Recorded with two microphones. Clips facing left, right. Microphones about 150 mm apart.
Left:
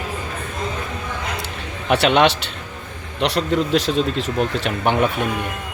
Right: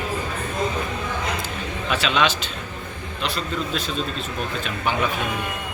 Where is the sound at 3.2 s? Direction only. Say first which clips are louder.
Left 8 dB; 80° left.